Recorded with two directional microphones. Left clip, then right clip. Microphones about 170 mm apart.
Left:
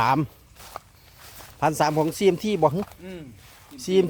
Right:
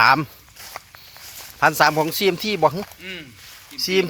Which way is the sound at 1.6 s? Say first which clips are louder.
Right 6 dB; 20° left (ahead or behind).